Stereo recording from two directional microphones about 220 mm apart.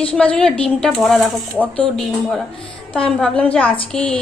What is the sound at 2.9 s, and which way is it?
A woman's voice, 5° left (ahead or behind).